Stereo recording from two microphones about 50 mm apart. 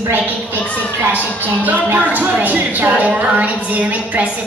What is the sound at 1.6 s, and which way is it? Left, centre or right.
A woman's voice, right.